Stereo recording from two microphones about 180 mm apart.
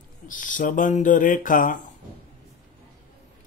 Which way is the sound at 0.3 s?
45° left (ahead or behind).